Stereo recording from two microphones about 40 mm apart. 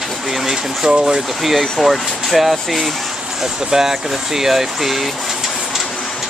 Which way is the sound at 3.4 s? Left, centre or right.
Centre.